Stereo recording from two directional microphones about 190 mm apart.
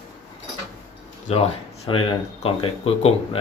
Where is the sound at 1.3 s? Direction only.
30° left (ahead or behind).